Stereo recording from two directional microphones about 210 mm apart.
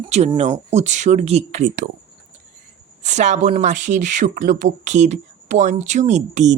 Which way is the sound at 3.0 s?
35° right (ahead or behind).